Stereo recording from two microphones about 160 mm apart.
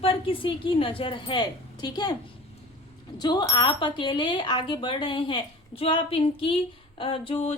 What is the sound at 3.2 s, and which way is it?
Speech, 25° left (ahead or behind).